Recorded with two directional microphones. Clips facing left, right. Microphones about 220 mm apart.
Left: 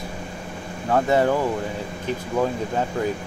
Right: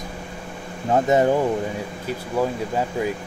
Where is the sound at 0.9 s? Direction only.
20° right (ahead or behind).